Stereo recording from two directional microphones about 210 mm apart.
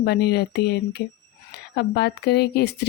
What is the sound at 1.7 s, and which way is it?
Speech, 50° left (ahead or behind).